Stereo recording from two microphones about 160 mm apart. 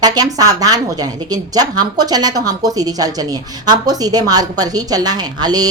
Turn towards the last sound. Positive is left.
turn(degrees=-25)  # may be behind; listen again after turning